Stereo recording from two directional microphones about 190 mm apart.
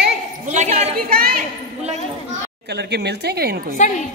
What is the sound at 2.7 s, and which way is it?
A woman's voice, 60° right (ahead or behind).